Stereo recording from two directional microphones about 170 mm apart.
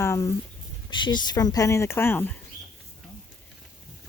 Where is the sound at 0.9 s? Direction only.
25° left (ahead or behind).